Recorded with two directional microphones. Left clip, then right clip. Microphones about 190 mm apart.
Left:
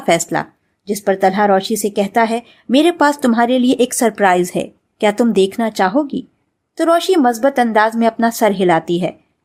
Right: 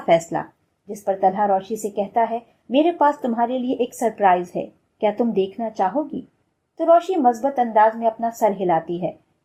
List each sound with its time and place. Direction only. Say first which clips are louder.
0.0 s a woman's voice: left 3 dB; 25° left (ahead or behind)